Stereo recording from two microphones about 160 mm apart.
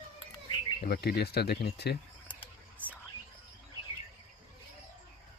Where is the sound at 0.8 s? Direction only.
75° left (ahead or behind).